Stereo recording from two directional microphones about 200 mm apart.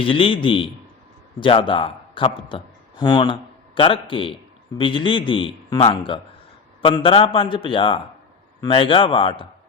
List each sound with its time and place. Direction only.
0.0 s a man's voice: 25° left (ahead or behind)